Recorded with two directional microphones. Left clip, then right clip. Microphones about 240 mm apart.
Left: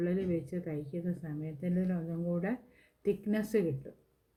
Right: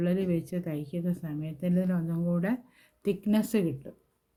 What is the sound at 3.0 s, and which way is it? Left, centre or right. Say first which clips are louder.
Speech: right 4 dB; right.